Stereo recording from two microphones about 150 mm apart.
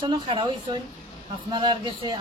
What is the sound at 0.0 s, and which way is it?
Speech, 35° right (ahead or behind).